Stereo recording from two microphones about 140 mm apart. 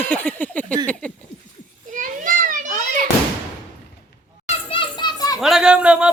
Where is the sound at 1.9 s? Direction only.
75° right (ahead or behind).